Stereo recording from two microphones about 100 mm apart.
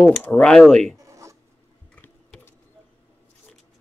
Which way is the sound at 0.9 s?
35° right (ahead or behind).